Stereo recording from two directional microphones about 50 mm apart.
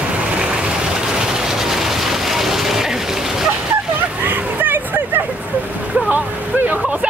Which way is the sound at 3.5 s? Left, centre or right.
Right.